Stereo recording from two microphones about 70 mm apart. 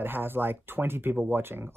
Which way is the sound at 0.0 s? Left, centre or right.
Right.